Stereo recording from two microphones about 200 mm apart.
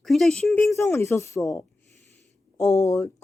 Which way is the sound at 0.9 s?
15° left (ahead or behind).